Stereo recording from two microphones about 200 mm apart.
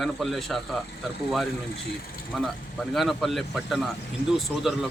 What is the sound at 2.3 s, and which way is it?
Speech, centre (ahead or behind).